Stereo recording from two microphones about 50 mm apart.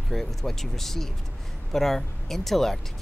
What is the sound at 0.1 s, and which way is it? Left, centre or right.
Speech, centre.